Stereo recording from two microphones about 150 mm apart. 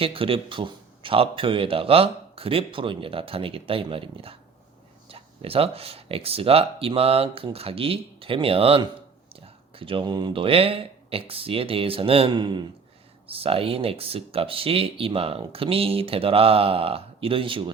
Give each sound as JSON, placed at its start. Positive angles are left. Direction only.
{"t": 0.0, "sound": "speech", "side_deg": -40}
{"t": 13.2, "sound": "speech", "side_deg": -40}